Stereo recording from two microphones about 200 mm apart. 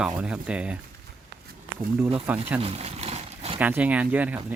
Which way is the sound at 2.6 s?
30° right (ahead or behind).